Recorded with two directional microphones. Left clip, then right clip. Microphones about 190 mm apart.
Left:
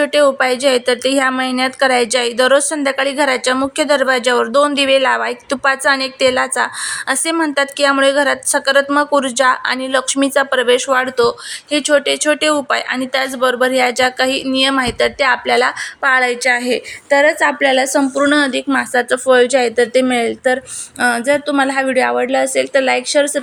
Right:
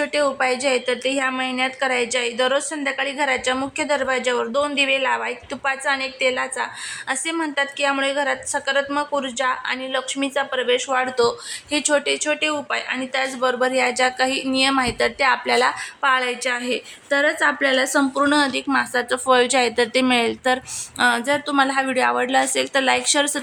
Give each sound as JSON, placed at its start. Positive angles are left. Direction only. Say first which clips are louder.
{"t": 0.0, "sound": "a woman's voice", "louder": "left 8 dB", "side_deg": 20}